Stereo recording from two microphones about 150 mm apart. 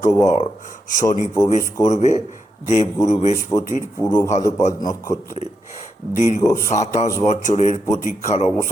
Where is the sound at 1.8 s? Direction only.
50° left (ahead or behind).